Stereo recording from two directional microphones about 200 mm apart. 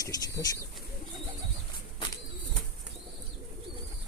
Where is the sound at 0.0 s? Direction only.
15° left (ahead or behind).